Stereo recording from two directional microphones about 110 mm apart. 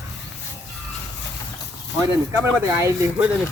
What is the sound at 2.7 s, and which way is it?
Speech, 25° right (ahead or behind).